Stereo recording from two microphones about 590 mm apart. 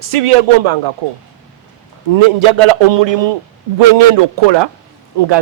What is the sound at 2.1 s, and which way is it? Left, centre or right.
A man's voice, right.